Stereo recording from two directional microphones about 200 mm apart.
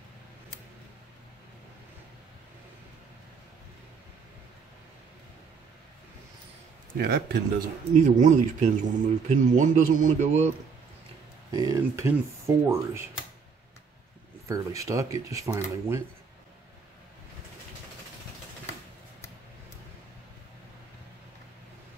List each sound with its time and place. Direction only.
7.0 s speech: 45° right (ahead or behind)
11.5 s speech: 15° right (ahead or behind)
14.5 s speech: 15° right (ahead or behind)